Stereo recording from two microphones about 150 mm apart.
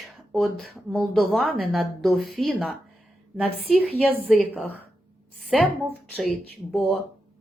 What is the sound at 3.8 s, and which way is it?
Speech, 10° left (ahead or behind).